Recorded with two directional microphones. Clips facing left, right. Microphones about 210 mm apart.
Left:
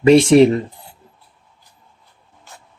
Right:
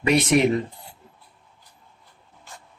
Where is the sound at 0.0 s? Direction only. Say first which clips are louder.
Left 10 dB; 30° left (ahead or behind).